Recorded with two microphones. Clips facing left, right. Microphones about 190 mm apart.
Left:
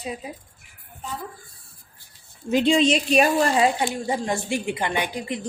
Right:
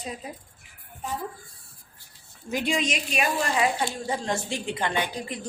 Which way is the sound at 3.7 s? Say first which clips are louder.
Left 4 dB; 15° left (ahead or behind).